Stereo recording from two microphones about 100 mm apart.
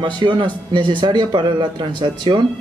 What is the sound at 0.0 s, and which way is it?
A man's voice, 50° right (ahead or behind).